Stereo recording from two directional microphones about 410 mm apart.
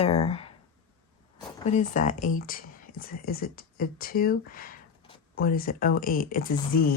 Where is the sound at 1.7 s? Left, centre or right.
Centre.